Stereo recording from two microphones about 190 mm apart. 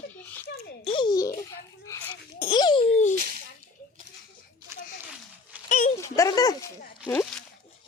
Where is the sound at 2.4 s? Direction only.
25° left (ahead or behind).